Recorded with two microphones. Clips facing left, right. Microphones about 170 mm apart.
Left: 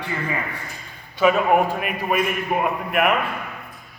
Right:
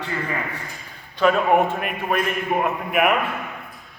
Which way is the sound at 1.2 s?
5° left (ahead or behind).